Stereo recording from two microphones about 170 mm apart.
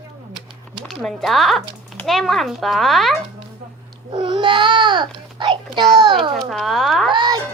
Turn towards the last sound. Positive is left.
turn(degrees=-25)  # may be behind; listen again after turning